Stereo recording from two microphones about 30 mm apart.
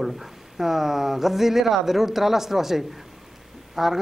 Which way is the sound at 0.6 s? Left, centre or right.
Centre.